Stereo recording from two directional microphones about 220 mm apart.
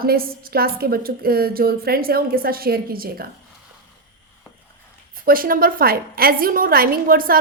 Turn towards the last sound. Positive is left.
turn(degrees=-40)  # may be behind; listen again after turning